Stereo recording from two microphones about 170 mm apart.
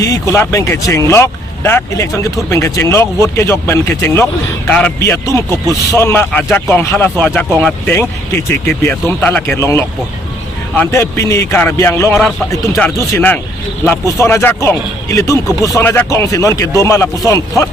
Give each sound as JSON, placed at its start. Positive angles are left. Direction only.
{"t": 0.0, "sound": "speech", "side_deg": 20}